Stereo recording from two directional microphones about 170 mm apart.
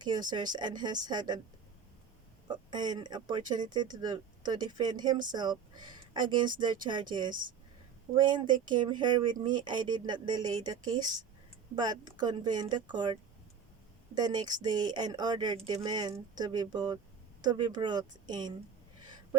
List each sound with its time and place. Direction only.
0.0 s speech: 25° right (ahead or behind)
2.5 s speech: 25° right (ahead or behind)
14.2 s speech: 25° right (ahead or behind)